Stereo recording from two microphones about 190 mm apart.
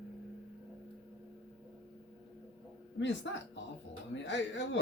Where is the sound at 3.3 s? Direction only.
70° left (ahead or behind).